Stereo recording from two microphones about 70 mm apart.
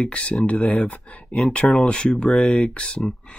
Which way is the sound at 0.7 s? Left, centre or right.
Centre.